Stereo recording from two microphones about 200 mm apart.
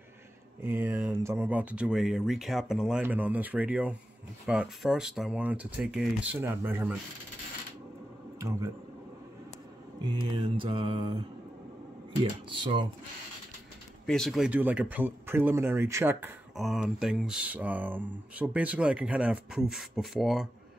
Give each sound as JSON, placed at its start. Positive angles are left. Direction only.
{"t": 0.6, "sound": "speech", "side_deg": -10}
{"t": 10.3, "sound": "mantra", "side_deg": -25}
{"t": 14.0, "sound": "speech", "side_deg": 5}